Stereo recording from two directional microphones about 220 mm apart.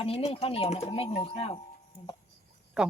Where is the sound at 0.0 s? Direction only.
25° left (ahead or behind).